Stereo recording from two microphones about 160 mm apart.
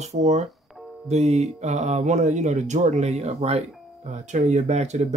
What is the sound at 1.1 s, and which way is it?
Speech, 40° right (ahead or behind).